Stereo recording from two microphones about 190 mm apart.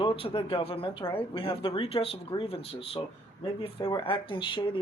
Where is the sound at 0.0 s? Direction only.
25° left (ahead or behind).